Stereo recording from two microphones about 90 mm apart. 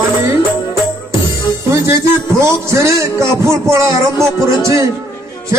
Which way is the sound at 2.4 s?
30° right (ahead or behind).